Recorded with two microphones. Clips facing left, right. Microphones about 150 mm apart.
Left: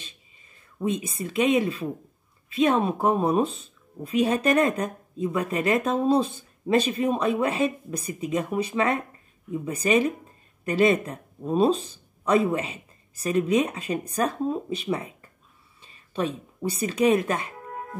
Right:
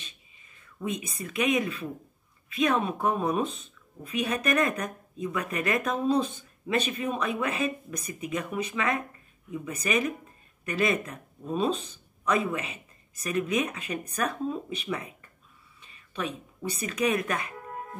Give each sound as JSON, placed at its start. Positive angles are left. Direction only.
{"t": 0.7, "sound": "speech", "side_deg": 30}